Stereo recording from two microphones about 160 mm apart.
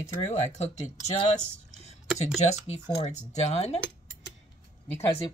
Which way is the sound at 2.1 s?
45° left (ahead or behind).